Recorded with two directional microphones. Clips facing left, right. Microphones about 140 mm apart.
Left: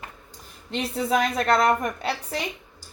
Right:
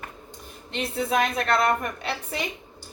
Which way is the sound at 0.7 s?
45° left (ahead or behind).